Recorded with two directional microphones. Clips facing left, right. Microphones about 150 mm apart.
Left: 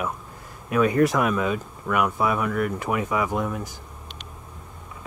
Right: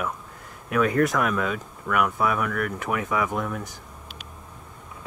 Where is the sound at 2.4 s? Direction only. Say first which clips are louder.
Left 3 dB; 20° left (ahead or behind).